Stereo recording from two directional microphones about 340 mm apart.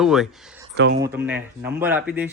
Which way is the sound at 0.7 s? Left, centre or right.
Right.